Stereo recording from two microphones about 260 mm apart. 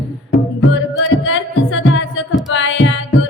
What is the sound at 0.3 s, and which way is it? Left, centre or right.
Music, left.